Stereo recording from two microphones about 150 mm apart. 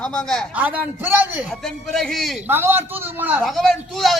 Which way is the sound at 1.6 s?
5° left (ahead or behind).